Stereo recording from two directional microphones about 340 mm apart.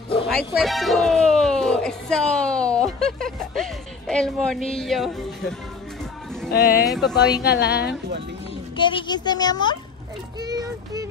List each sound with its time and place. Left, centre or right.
0.5 s speech: centre
6.5 s a woman's voice: left
6.9 s speech: centre
7.4 s a woman's voice: left
8.7 s a child's voice: centre
10.4 s speech: centre